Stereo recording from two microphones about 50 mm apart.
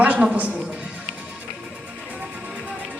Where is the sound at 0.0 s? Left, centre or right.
Right.